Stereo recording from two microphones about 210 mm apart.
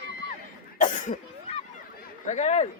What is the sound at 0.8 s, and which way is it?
Cough, 35° left (ahead or behind).